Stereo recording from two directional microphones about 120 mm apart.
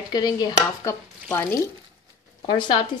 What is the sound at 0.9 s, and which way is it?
Stir, 20° left (ahead or behind).